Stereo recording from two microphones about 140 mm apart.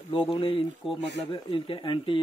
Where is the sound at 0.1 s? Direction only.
40° left (ahead or behind).